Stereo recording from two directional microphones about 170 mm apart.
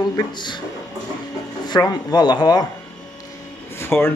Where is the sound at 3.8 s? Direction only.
15° left (ahead or behind).